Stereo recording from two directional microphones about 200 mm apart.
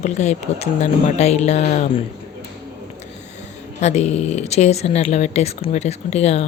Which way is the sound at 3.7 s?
35° left (ahead or behind).